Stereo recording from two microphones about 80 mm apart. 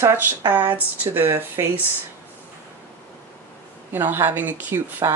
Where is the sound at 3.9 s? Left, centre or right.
Right.